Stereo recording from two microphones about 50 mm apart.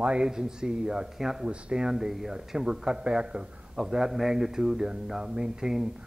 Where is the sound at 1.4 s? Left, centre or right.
Right.